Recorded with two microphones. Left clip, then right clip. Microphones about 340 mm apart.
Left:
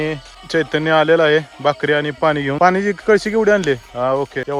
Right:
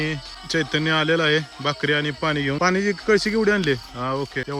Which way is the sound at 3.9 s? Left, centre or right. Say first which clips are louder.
Left 8 dB; left.